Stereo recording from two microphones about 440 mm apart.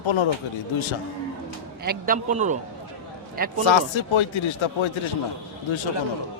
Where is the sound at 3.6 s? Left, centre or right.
Left.